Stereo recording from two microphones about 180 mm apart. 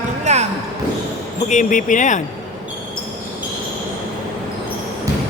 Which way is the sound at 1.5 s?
45° left (ahead or behind).